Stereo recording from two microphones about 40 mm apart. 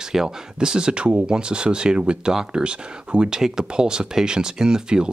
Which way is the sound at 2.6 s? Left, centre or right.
Right.